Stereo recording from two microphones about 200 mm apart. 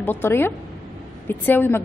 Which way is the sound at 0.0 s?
10° left (ahead or behind).